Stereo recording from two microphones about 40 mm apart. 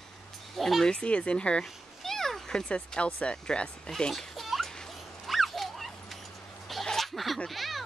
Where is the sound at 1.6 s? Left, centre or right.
Centre.